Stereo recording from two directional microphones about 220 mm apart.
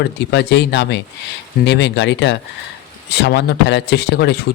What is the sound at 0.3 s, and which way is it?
Speech, 50° left (ahead or behind).